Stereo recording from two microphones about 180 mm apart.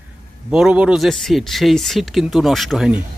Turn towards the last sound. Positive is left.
turn(degrees=-5)  # may be behind; listen again after turning